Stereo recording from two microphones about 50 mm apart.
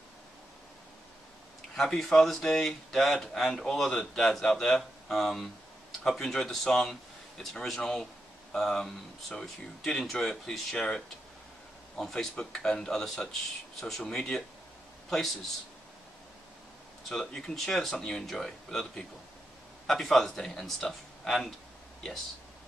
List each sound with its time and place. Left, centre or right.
1.8 s speech: centre
12.0 s speech: centre
17.1 s speech: centre